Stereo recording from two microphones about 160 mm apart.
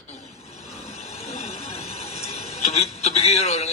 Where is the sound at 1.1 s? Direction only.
40° left (ahead or behind).